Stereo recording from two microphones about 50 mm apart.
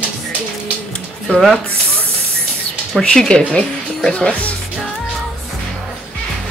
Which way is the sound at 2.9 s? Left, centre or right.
Centre.